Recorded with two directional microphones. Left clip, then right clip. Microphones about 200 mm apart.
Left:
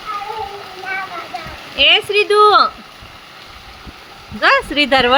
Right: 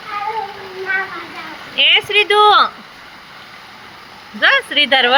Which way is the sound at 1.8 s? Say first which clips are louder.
Even; 30° left (ahead or behind).